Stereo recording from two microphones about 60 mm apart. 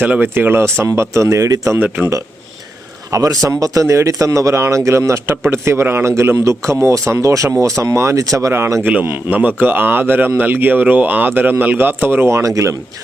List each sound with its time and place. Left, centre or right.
0.0 s speech: right
3.1 s speech: right
6.3 s speech: right
9.0 s speech: right